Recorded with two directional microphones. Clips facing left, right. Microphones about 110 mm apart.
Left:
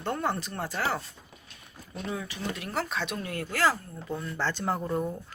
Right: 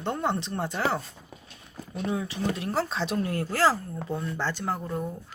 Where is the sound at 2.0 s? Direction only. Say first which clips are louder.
Right 5 dB; 20° right (ahead or behind).